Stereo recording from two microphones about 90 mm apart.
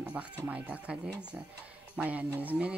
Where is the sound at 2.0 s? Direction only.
20° right (ahead or behind).